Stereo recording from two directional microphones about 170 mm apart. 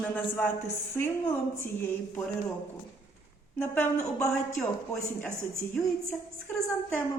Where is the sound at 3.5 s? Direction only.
10° left (ahead or behind).